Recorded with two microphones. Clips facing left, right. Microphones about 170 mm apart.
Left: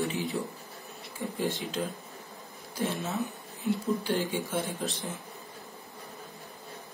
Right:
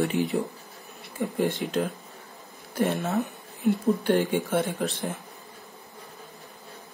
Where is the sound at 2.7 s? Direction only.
60° right (ahead or behind).